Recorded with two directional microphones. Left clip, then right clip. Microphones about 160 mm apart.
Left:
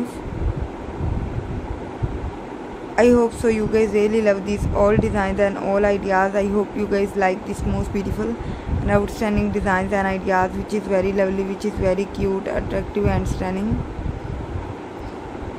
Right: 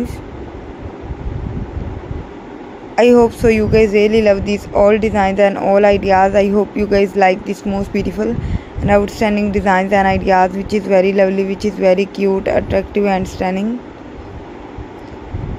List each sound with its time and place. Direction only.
3.0 s a woman's voice: 30° right (ahead or behind)